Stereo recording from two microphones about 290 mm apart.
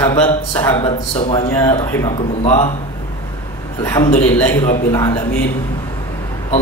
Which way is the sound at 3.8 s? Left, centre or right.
Centre.